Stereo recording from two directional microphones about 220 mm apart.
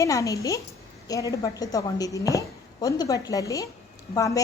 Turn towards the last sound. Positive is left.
turn(degrees=15)  # may be behind; listen again after turning